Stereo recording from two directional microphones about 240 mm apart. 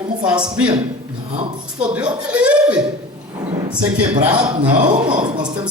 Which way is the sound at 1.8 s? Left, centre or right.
Centre.